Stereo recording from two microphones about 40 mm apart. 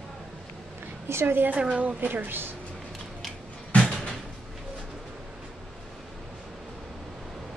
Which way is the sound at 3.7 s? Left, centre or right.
Left.